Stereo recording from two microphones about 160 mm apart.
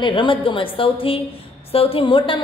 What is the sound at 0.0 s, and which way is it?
A woman's voice, 30° left (ahead or behind).